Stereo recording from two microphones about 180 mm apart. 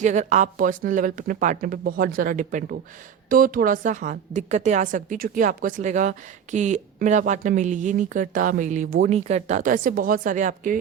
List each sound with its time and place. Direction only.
0.0 s a woman's voice: 40° right (ahead or behind)